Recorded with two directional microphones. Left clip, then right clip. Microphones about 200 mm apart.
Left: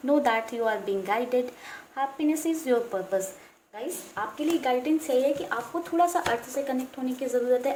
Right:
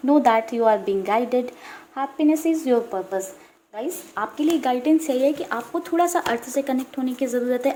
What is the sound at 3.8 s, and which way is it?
A woman's voice, 35° right (ahead or behind).